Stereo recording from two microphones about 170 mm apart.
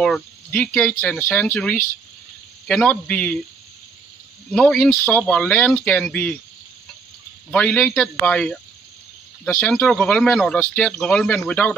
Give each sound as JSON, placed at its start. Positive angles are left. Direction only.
{"t": 0.0, "sound": "speech", "side_deg": 5}
{"t": 4.5, "sound": "speech", "side_deg": 5}
{"t": 7.5, "sound": "speech", "side_deg": 5}